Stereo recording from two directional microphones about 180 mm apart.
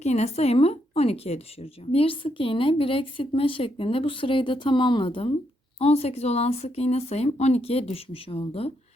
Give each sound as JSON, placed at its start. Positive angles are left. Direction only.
{"t": 0.0, "sound": "speech", "side_deg": 40}